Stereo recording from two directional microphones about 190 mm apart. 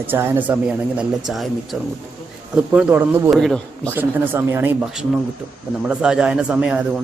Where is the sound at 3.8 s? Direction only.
10° right (ahead or behind).